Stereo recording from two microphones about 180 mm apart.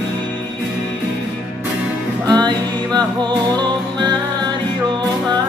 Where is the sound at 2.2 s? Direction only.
25° right (ahead or behind).